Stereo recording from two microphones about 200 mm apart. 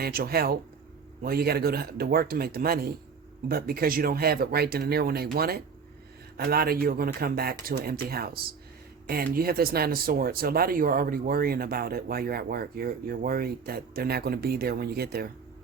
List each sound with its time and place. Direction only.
0.0 s speech: 50° right (ahead or behind)